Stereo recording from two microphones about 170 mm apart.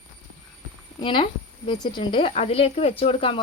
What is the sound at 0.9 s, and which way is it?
A woman's voice, 30° left (ahead or behind).